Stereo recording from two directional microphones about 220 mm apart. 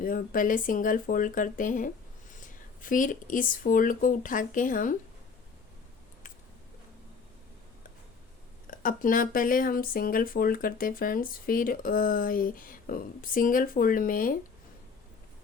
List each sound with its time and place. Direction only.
0.0 s speech: 40° left (ahead or behind)
8.8 s speech: 40° left (ahead or behind)